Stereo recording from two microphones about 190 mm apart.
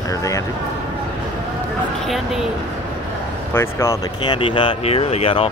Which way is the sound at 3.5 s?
15° left (ahead or behind).